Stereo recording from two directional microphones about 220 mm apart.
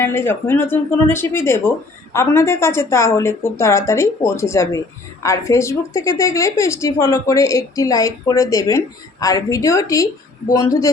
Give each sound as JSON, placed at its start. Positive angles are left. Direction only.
{"t": 0.0, "sound": "speech", "side_deg": 10}